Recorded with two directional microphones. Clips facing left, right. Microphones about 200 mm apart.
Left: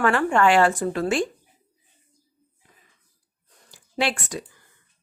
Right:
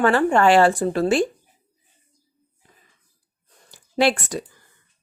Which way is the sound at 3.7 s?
40° right (ahead or behind).